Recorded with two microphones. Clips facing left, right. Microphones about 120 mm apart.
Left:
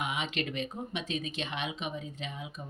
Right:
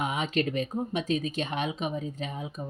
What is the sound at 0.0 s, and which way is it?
Speech, 40° right (ahead or behind).